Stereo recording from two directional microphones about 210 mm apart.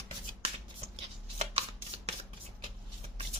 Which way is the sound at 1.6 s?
30° right (ahead or behind).